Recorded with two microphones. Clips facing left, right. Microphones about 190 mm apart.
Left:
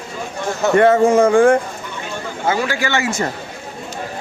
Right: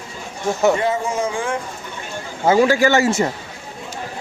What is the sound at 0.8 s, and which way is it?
Speech, 65° left (ahead or behind).